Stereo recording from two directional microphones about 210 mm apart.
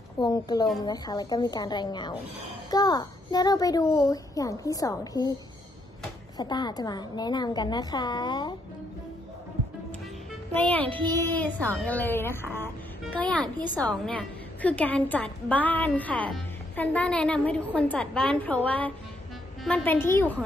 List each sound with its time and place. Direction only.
0.2 s a woman's voice: 20° left (ahead or behind)
6.3 s a woman's voice: 20° left (ahead or behind)
10.5 s a woman's voice: 5° left (ahead or behind)
13.4 s a woman's voice: 20° right (ahead or behind)
13.7 s a woman's voice: 5° left (ahead or behind)